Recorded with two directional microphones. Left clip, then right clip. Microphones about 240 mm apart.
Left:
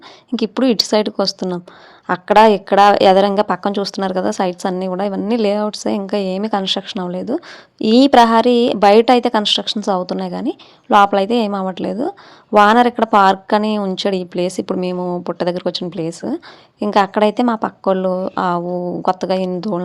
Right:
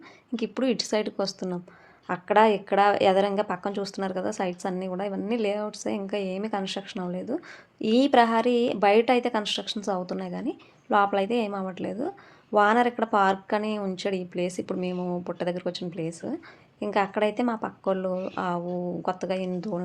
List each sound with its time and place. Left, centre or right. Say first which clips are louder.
0.3 s a woman's voice: left 11 dB; left